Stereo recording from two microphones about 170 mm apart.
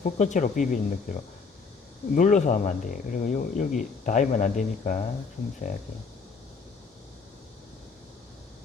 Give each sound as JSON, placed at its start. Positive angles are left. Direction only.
{"t": 0.0, "sound": "speech", "side_deg": 45}
{"t": 2.1, "sound": "speech", "side_deg": 45}